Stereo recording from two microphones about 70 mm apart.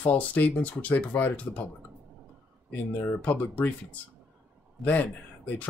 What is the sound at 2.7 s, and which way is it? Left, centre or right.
Speech, left.